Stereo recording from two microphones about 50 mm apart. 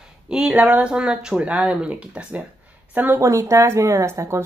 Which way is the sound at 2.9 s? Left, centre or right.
Right.